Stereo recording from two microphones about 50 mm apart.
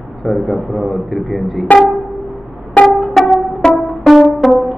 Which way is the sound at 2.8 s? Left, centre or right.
Left.